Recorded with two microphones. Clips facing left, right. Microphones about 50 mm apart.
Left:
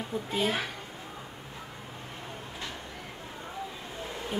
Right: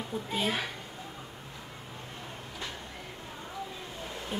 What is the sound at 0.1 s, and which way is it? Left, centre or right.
Speech, left.